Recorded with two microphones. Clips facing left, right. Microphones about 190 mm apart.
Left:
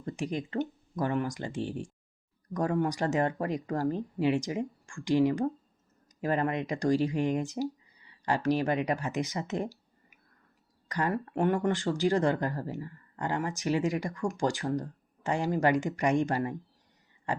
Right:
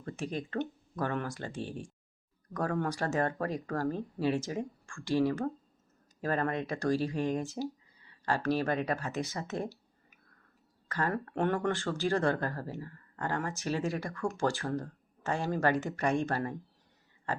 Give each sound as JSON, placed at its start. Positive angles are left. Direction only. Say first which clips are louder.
{"t": 0.0, "sound": "speech", "louder": "left 3 dB", "side_deg": 15}